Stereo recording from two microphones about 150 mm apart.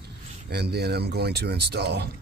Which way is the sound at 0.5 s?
90° right.